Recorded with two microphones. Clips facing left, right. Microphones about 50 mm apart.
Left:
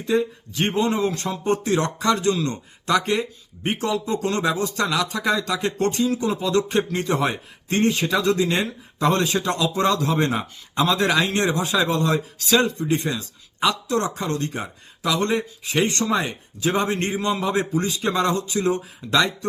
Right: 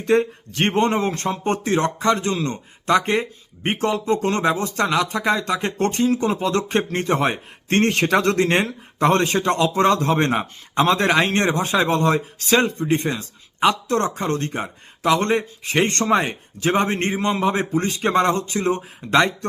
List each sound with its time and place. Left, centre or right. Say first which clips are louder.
0.0 s speech: right 3 dB; right
7.7 s speech: right 3 dB; right